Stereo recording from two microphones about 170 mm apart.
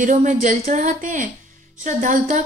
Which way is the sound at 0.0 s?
45° right (ahead or behind).